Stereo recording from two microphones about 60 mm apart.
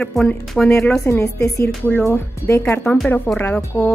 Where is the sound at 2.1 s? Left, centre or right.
Left.